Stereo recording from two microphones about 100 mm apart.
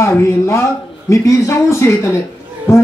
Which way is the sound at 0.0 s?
25° left (ahead or behind).